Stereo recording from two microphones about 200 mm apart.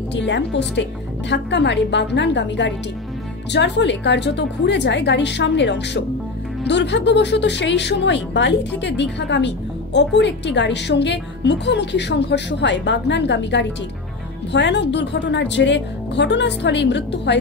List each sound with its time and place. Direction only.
0.1 s a woman's voice: 60° left (ahead or behind)